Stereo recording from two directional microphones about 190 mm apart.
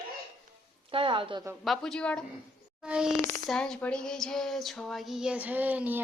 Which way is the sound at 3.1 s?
10° left (ahead or behind).